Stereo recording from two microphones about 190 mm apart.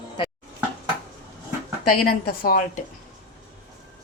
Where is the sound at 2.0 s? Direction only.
50° left (ahead or behind).